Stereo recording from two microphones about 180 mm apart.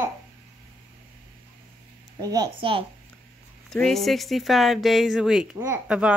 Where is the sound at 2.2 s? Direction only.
20° right (ahead or behind).